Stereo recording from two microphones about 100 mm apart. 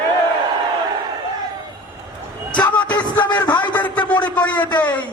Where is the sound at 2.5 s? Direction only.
50° left (ahead or behind).